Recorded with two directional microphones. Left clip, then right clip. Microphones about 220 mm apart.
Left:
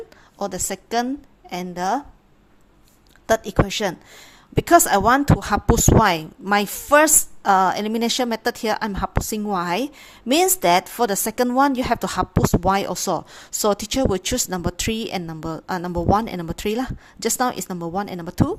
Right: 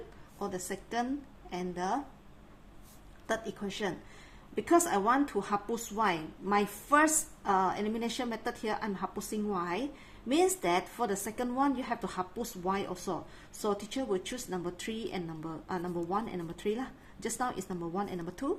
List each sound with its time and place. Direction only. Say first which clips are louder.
0.3 s a woman's voice: left 11 dB; 40° left (ahead or behind)
3.2 s a woman's voice: left 16 dB; 45° left (ahead or behind)